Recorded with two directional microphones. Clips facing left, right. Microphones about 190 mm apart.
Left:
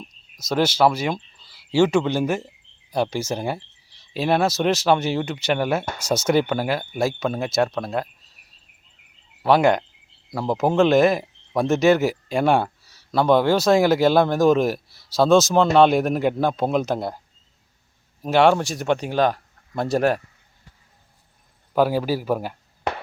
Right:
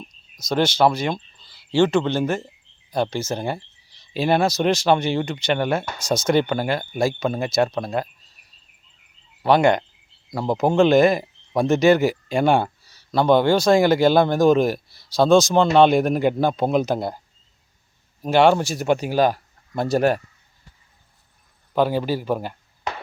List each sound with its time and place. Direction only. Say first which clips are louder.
0.3 s speech: even; 5° left (ahead or behind)
9.4 s speech: even; centre (ahead or behind)
18.2 s speech: right 1 dB; centre (ahead or behind)
21.7 s speech: left 1 dB; 5° left (ahead or behind)
22.9 s a sound: left 3 dB; 60° left (ahead or behind)